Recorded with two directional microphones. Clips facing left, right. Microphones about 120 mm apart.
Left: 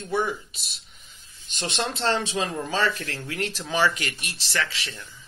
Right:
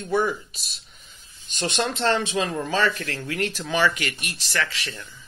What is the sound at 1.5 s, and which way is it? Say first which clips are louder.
Speech: right 3 dB; 25° left (ahead or behind).